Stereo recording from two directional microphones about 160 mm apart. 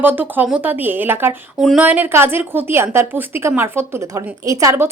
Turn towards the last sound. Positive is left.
turn(degrees=-15)  # may be behind; listen again after turning